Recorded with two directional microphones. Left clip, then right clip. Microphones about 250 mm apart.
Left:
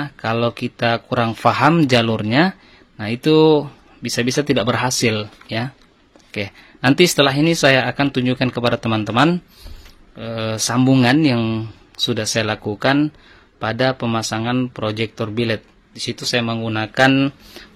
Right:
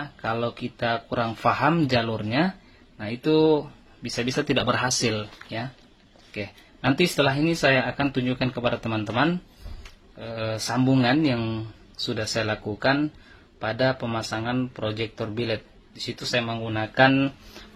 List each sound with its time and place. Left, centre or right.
0.0 s speech: left
6.9 s speech: left